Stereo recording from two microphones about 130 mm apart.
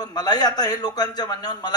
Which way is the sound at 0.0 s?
30° left (ahead or behind).